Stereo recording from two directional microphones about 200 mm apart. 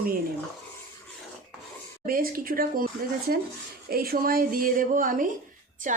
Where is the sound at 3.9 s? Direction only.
50° right (ahead or behind).